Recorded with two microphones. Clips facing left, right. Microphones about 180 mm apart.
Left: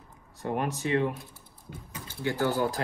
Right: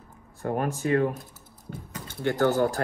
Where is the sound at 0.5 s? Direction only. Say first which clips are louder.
Right 3 dB; 45° right (ahead or behind).